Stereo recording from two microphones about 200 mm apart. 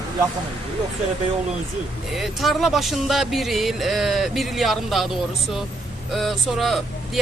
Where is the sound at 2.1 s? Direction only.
Centre (ahead or behind).